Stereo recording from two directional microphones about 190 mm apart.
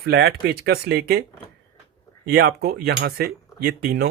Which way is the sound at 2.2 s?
55° right (ahead or behind).